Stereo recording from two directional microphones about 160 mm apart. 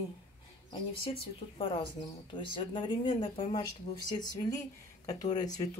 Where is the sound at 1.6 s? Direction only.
35° left (ahead or behind).